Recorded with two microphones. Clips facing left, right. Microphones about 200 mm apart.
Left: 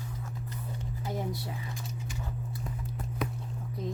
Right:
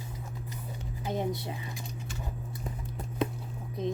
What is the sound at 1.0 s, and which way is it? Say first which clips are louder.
Speech: right 4 dB; 20° right (ahead or behind).